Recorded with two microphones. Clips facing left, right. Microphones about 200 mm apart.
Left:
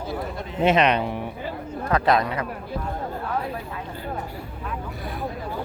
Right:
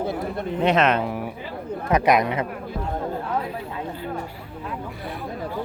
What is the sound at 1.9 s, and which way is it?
Speech, 15° right (ahead or behind).